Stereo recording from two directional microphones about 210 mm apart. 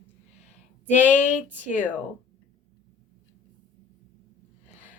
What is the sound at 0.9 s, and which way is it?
Speech, 35° left (ahead or behind).